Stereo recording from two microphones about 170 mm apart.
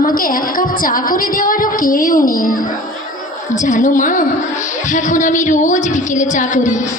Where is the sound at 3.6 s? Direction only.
50° left (ahead or behind).